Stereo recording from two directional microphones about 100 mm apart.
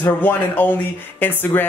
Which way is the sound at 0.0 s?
20° left (ahead or behind).